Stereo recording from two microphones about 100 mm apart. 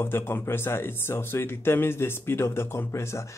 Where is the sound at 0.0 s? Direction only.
20° left (ahead or behind).